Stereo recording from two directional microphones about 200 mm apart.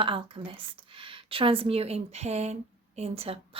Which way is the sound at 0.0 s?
25° right (ahead or behind).